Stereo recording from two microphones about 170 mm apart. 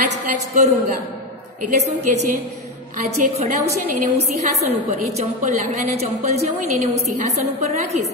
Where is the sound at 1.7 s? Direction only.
40° right (ahead or behind).